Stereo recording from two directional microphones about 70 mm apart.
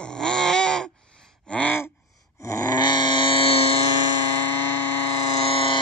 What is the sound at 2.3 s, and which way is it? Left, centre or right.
Groan, left.